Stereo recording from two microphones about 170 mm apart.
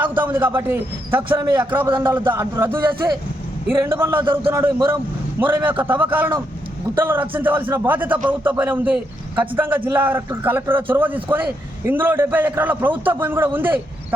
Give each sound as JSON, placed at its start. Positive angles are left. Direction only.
{"t": 0.3, "sound": "a man's voice", "side_deg": -10}
{"t": 1.9, "sound": "speech", "side_deg": -30}
{"t": 2.3, "sound": "a man's voice", "side_deg": -15}